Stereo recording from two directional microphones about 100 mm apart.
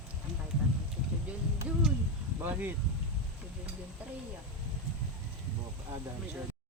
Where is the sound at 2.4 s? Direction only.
20° right (ahead or behind).